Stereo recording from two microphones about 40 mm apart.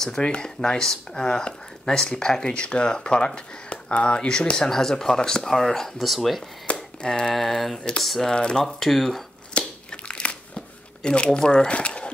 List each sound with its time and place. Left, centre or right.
0.2 s speech: left
6.0 s speech: centre
6.7 s a sound: left
7.1 s speech: centre
7.3 s speech: centre
8.2 s speech: centre
8.6 s speech: centre
9.5 s crushing: left
11.0 s speech: centre